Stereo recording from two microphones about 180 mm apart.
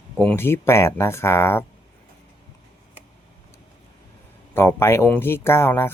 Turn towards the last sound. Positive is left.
turn(degrees=15)  # may be behind; listen again after turning